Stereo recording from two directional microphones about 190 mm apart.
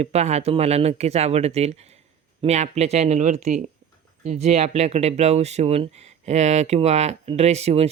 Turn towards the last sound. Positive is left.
turn(degrees=-35)  # may be behind; listen again after turning